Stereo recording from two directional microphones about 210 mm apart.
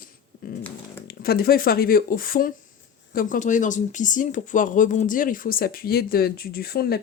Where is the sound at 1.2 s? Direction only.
45° left (ahead or behind).